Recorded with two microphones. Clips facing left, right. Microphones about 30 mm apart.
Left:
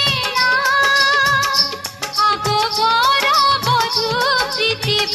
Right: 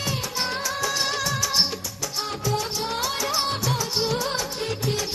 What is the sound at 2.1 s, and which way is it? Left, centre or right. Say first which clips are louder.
Music of bollywood: left 12 dB; left.